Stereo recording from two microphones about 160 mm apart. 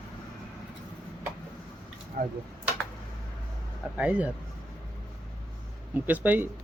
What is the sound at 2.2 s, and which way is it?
Speech, 60° right (ahead or behind).